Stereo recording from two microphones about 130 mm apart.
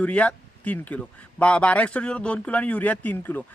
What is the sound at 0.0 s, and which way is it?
Speech, 10° left (ahead or behind).